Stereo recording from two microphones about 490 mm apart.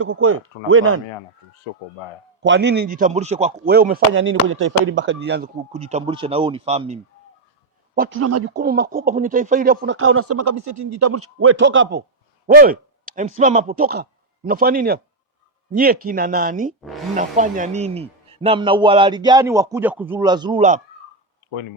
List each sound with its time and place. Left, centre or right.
0.0 s speech: right
2.4 s speech: right
8.2 s speech: right